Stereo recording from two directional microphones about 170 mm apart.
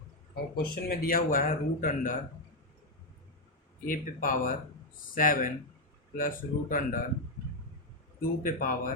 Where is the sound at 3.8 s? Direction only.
50° left (ahead or behind).